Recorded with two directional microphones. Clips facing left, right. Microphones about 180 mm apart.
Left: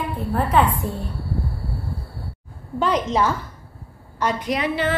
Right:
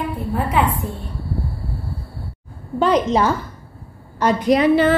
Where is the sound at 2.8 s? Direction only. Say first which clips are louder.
Right 4 dB; 35° right (ahead or behind).